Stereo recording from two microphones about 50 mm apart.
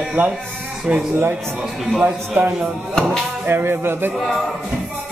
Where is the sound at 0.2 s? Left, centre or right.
Right.